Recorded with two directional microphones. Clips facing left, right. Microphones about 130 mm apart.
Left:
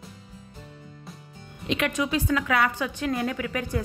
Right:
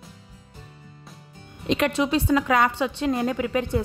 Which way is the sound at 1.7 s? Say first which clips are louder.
Right 4 dB; 35° right (ahead or behind).